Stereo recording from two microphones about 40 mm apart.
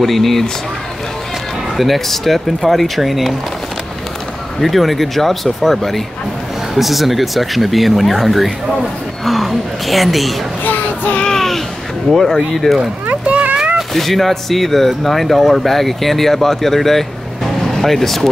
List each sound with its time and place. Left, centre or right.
0.0 s speech: centre
1.8 s speech: centre
4.6 s speech: centre
10.6 s child singing: left
11.2 s a sound: centre
12.1 s speech: centre
13.1 s a sound: right
13.9 s speech: centre